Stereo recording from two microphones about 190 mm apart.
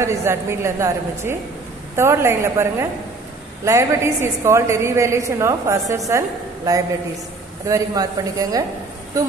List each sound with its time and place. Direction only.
0.0 s a woman's voice: 15° right (ahead or behind)